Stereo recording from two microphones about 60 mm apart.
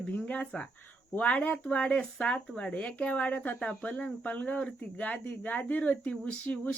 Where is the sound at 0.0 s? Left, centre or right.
Centre.